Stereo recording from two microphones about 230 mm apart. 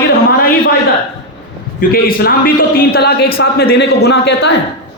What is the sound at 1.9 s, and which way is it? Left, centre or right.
A man's voice, left.